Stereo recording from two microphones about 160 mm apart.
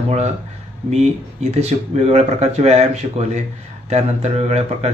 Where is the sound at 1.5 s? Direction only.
40° right (ahead or behind).